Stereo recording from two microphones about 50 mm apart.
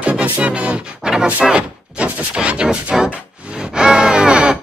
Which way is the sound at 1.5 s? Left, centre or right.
Right.